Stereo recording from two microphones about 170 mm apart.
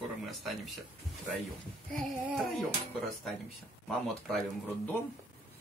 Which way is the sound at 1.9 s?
Centre (ahead or behind).